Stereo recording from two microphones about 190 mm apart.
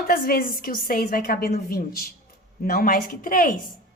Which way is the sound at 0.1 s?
50° left (ahead or behind).